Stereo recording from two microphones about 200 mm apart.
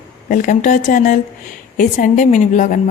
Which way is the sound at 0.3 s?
40° left (ahead or behind).